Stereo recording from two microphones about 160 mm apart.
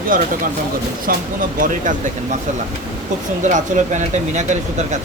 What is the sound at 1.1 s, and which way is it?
Speech, 65° right (ahead or behind).